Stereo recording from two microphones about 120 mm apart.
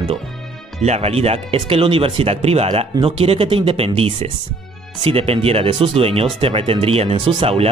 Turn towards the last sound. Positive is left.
turn(degrees=-50)  # may be behind; listen again after turning